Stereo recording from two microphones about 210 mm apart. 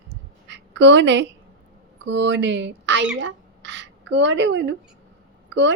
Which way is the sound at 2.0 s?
60° right (ahead or behind).